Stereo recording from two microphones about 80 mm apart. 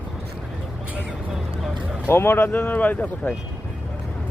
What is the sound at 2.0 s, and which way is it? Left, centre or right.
Speech, left.